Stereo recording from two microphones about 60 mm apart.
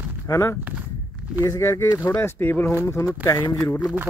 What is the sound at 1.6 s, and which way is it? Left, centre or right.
Speech, left.